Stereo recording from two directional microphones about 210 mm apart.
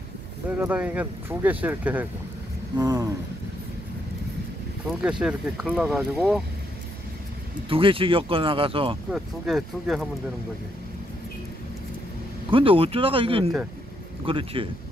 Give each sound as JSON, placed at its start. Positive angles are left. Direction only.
{"t": 0.6, "sound": "speech", "side_deg": -5}
{"t": 5.2, "sound": "speech", "side_deg": -5}
{"t": 7.7, "sound": "speech", "side_deg": -25}
{"t": 9.1, "sound": "speech", "side_deg": 0}
{"t": 12.4, "sound": "speech", "side_deg": -25}